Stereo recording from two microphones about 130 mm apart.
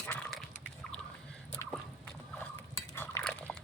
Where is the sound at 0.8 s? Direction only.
5° left (ahead or behind).